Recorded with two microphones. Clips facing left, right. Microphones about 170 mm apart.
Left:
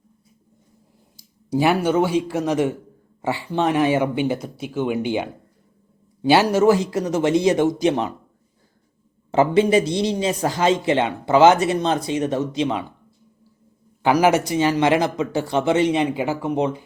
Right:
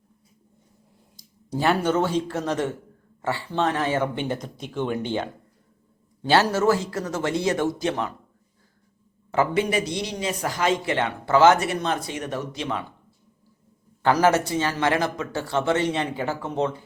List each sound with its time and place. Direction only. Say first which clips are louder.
1.5 s speech: left 4 dB; 10° left (ahead or behind)
9.3 s speech: left 6 dB; 25° left (ahead or behind)
14.0 s speech: left 3 dB; 10° left (ahead or behind)